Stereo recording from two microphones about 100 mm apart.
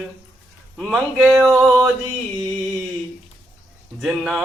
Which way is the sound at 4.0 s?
Centre (ahead or behind).